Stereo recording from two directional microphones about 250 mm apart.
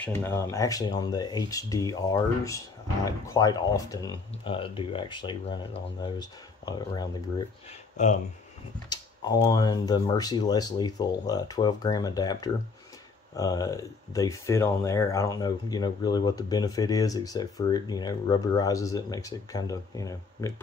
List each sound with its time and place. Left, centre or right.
0.0 s speech: centre
8.8 s speech: centre